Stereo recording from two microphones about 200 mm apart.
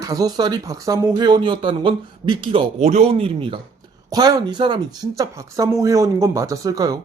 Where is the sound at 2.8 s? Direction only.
35° right (ahead or behind).